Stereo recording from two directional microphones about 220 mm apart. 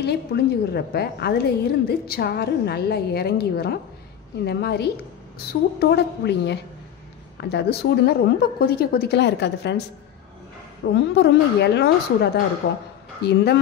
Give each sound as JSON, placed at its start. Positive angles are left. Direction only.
{"t": 0.0, "sound": "a woman's voice", "side_deg": 45}
{"t": 11.0, "sound": "a woman's voice", "side_deg": 50}